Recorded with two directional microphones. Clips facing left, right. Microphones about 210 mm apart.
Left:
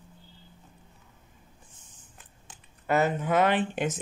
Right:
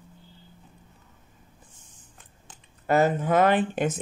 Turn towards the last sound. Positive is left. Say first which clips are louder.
# right 3 dB
turn(degrees=-45)  # may be behind; listen again after turning